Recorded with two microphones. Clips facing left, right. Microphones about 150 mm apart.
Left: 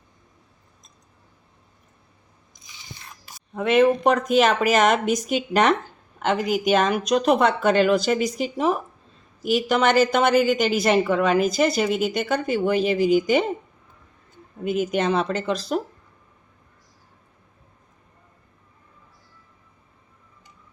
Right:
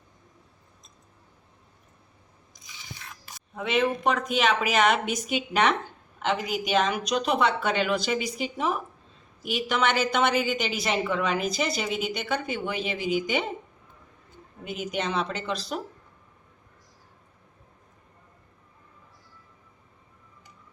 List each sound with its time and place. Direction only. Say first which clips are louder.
3.3 s a sound: left 8 dB; 50° left (ahead or behind)
4.0 s a woman's voice: left 6 dB; 45° left (ahead or behind)
14.6 s a woman's voice: left 8 dB; 50° left (ahead or behind)